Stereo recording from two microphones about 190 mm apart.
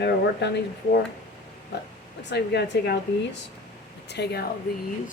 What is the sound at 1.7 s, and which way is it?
A woman's voice, 60° left (ahead or behind).